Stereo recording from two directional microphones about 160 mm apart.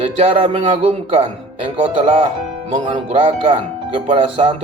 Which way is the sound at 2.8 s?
40° right (ahead or behind).